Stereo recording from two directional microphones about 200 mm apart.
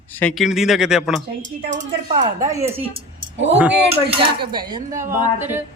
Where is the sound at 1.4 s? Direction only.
40° right (ahead or behind).